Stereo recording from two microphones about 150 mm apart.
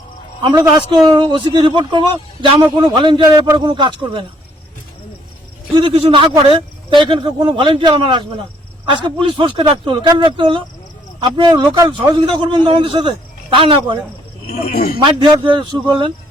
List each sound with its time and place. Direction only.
0.5 s a man's voice: 25° right (ahead or behind)
5.7 s a man's voice: 35° right (ahead or behind)
14.4 s speech: 75° left (ahead or behind)
14.9 s a man's voice: 30° right (ahead or behind)